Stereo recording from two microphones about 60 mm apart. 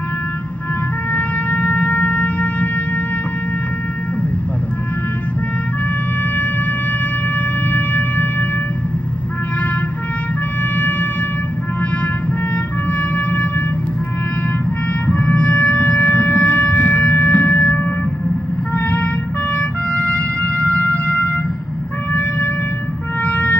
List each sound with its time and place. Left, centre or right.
1.1 s shofar: left
7.7 s shofar: left
10.8 s wind instrument: left
13.1 s wind instrument: left
15.1 s emergency vehicle: left
15.9 s shofar: left
20.4 s music: left
23.2 s music: left